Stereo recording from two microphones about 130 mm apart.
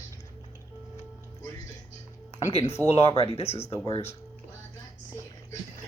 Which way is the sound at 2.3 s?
55° left (ahead or behind).